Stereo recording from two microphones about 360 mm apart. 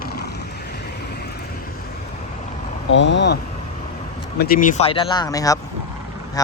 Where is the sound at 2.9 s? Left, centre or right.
Left.